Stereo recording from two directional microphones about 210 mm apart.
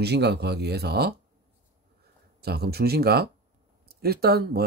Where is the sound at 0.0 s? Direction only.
50° right (ahead or behind).